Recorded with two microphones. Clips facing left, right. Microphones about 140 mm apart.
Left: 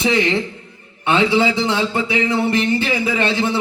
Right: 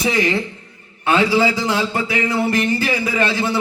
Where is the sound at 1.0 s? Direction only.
25° left (ahead or behind).